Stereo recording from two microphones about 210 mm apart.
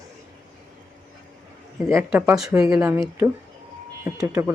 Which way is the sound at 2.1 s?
5° right (ahead or behind).